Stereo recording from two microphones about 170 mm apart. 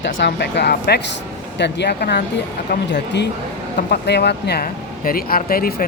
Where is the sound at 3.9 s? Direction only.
75° left (ahead or behind); by 5.7 s 60° left (ahead or behind).